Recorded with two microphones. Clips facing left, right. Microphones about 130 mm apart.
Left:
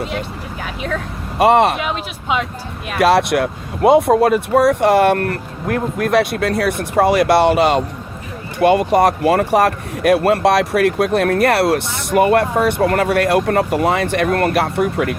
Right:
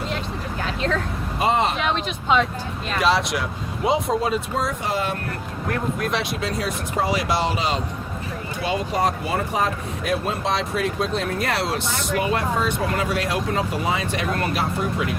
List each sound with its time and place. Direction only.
1.4 s speech: 65° left (ahead or behind)
1.8 s speech: 5° left (ahead or behind)
3.0 s speech: 60° left (ahead or behind)
5.7 s speech: 55° left (ahead or behind)